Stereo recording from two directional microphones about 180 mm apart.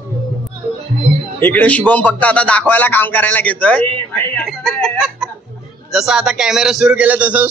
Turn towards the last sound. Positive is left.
turn(degrees=-10)  # may be behind; listen again after turning